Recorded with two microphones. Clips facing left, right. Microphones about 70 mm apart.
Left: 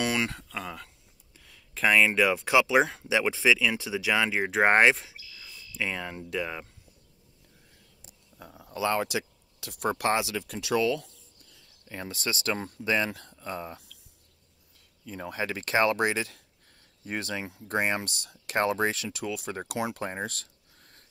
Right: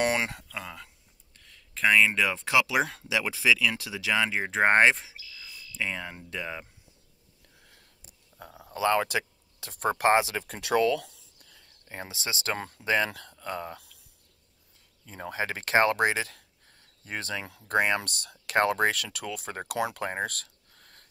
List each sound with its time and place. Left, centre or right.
0.0 s a sound: right
0.5 s speech: centre
2.6 s speech: left
4.2 s speech: centre
8.7 s speech: right
11.0 s a sound: right
12.0 s speech: centre
12.5 s speech: right
13.1 s speech: right
15.0 s speech: right
17.4 s speech: right
19.8 s a sound: right